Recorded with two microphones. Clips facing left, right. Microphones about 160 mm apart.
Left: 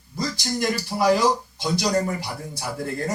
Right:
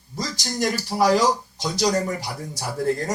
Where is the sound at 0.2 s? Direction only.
40° right (ahead or behind).